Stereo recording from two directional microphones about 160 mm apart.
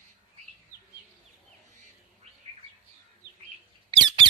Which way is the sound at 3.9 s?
30° right (ahead or behind).